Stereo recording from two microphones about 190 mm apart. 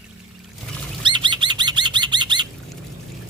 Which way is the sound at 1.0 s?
25° right (ahead or behind).